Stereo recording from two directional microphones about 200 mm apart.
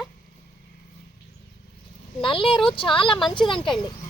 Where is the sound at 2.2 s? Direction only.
25° left (ahead or behind).